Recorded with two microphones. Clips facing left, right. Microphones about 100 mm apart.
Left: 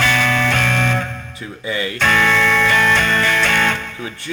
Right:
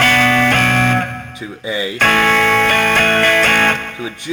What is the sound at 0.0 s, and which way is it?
Music, 60° right (ahead or behind).